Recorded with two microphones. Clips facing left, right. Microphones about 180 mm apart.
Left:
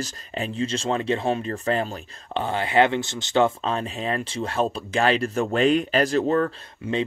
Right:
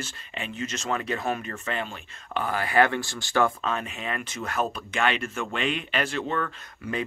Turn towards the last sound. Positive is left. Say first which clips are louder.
# left 5 dB
turn(degrees=30)  # may be behind; listen again after turning